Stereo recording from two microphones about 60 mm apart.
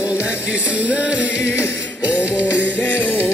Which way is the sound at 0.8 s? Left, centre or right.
Right.